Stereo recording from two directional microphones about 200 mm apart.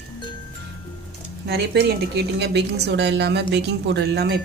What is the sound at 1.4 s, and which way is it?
A woman's voice, 55° right (ahead or behind).